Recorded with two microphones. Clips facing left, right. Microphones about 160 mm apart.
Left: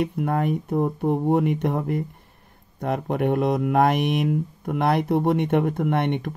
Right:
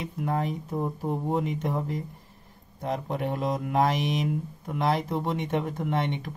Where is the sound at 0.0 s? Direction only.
60° left (ahead or behind).